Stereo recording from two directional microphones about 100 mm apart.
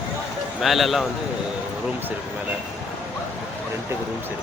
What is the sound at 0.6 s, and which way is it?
Speech, centre (ahead or behind).